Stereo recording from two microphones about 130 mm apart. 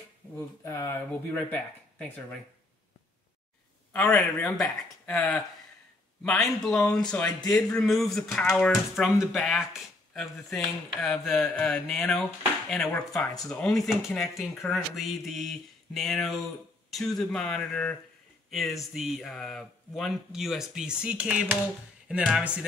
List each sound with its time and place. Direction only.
0.2 s a sound: 15° right (ahead or behind)
0.7 s speech: 20° left (ahead or behind)
3.9 s speech: 10° left (ahead or behind); by 21.5 s 10° right (ahead or behind)